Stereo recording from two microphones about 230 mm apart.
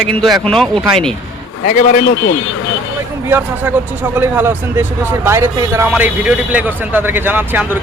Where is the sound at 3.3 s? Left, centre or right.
Centre.